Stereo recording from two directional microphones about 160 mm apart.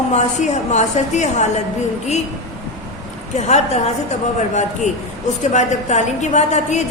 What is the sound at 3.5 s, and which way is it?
Speech, 45° left (ahead or behind).